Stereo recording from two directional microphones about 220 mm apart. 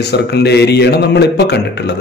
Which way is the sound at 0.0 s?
50° left (ahead or behind).